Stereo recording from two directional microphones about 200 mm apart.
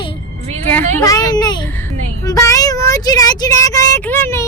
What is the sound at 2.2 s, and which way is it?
Child singing, 15° left (ahead or behind).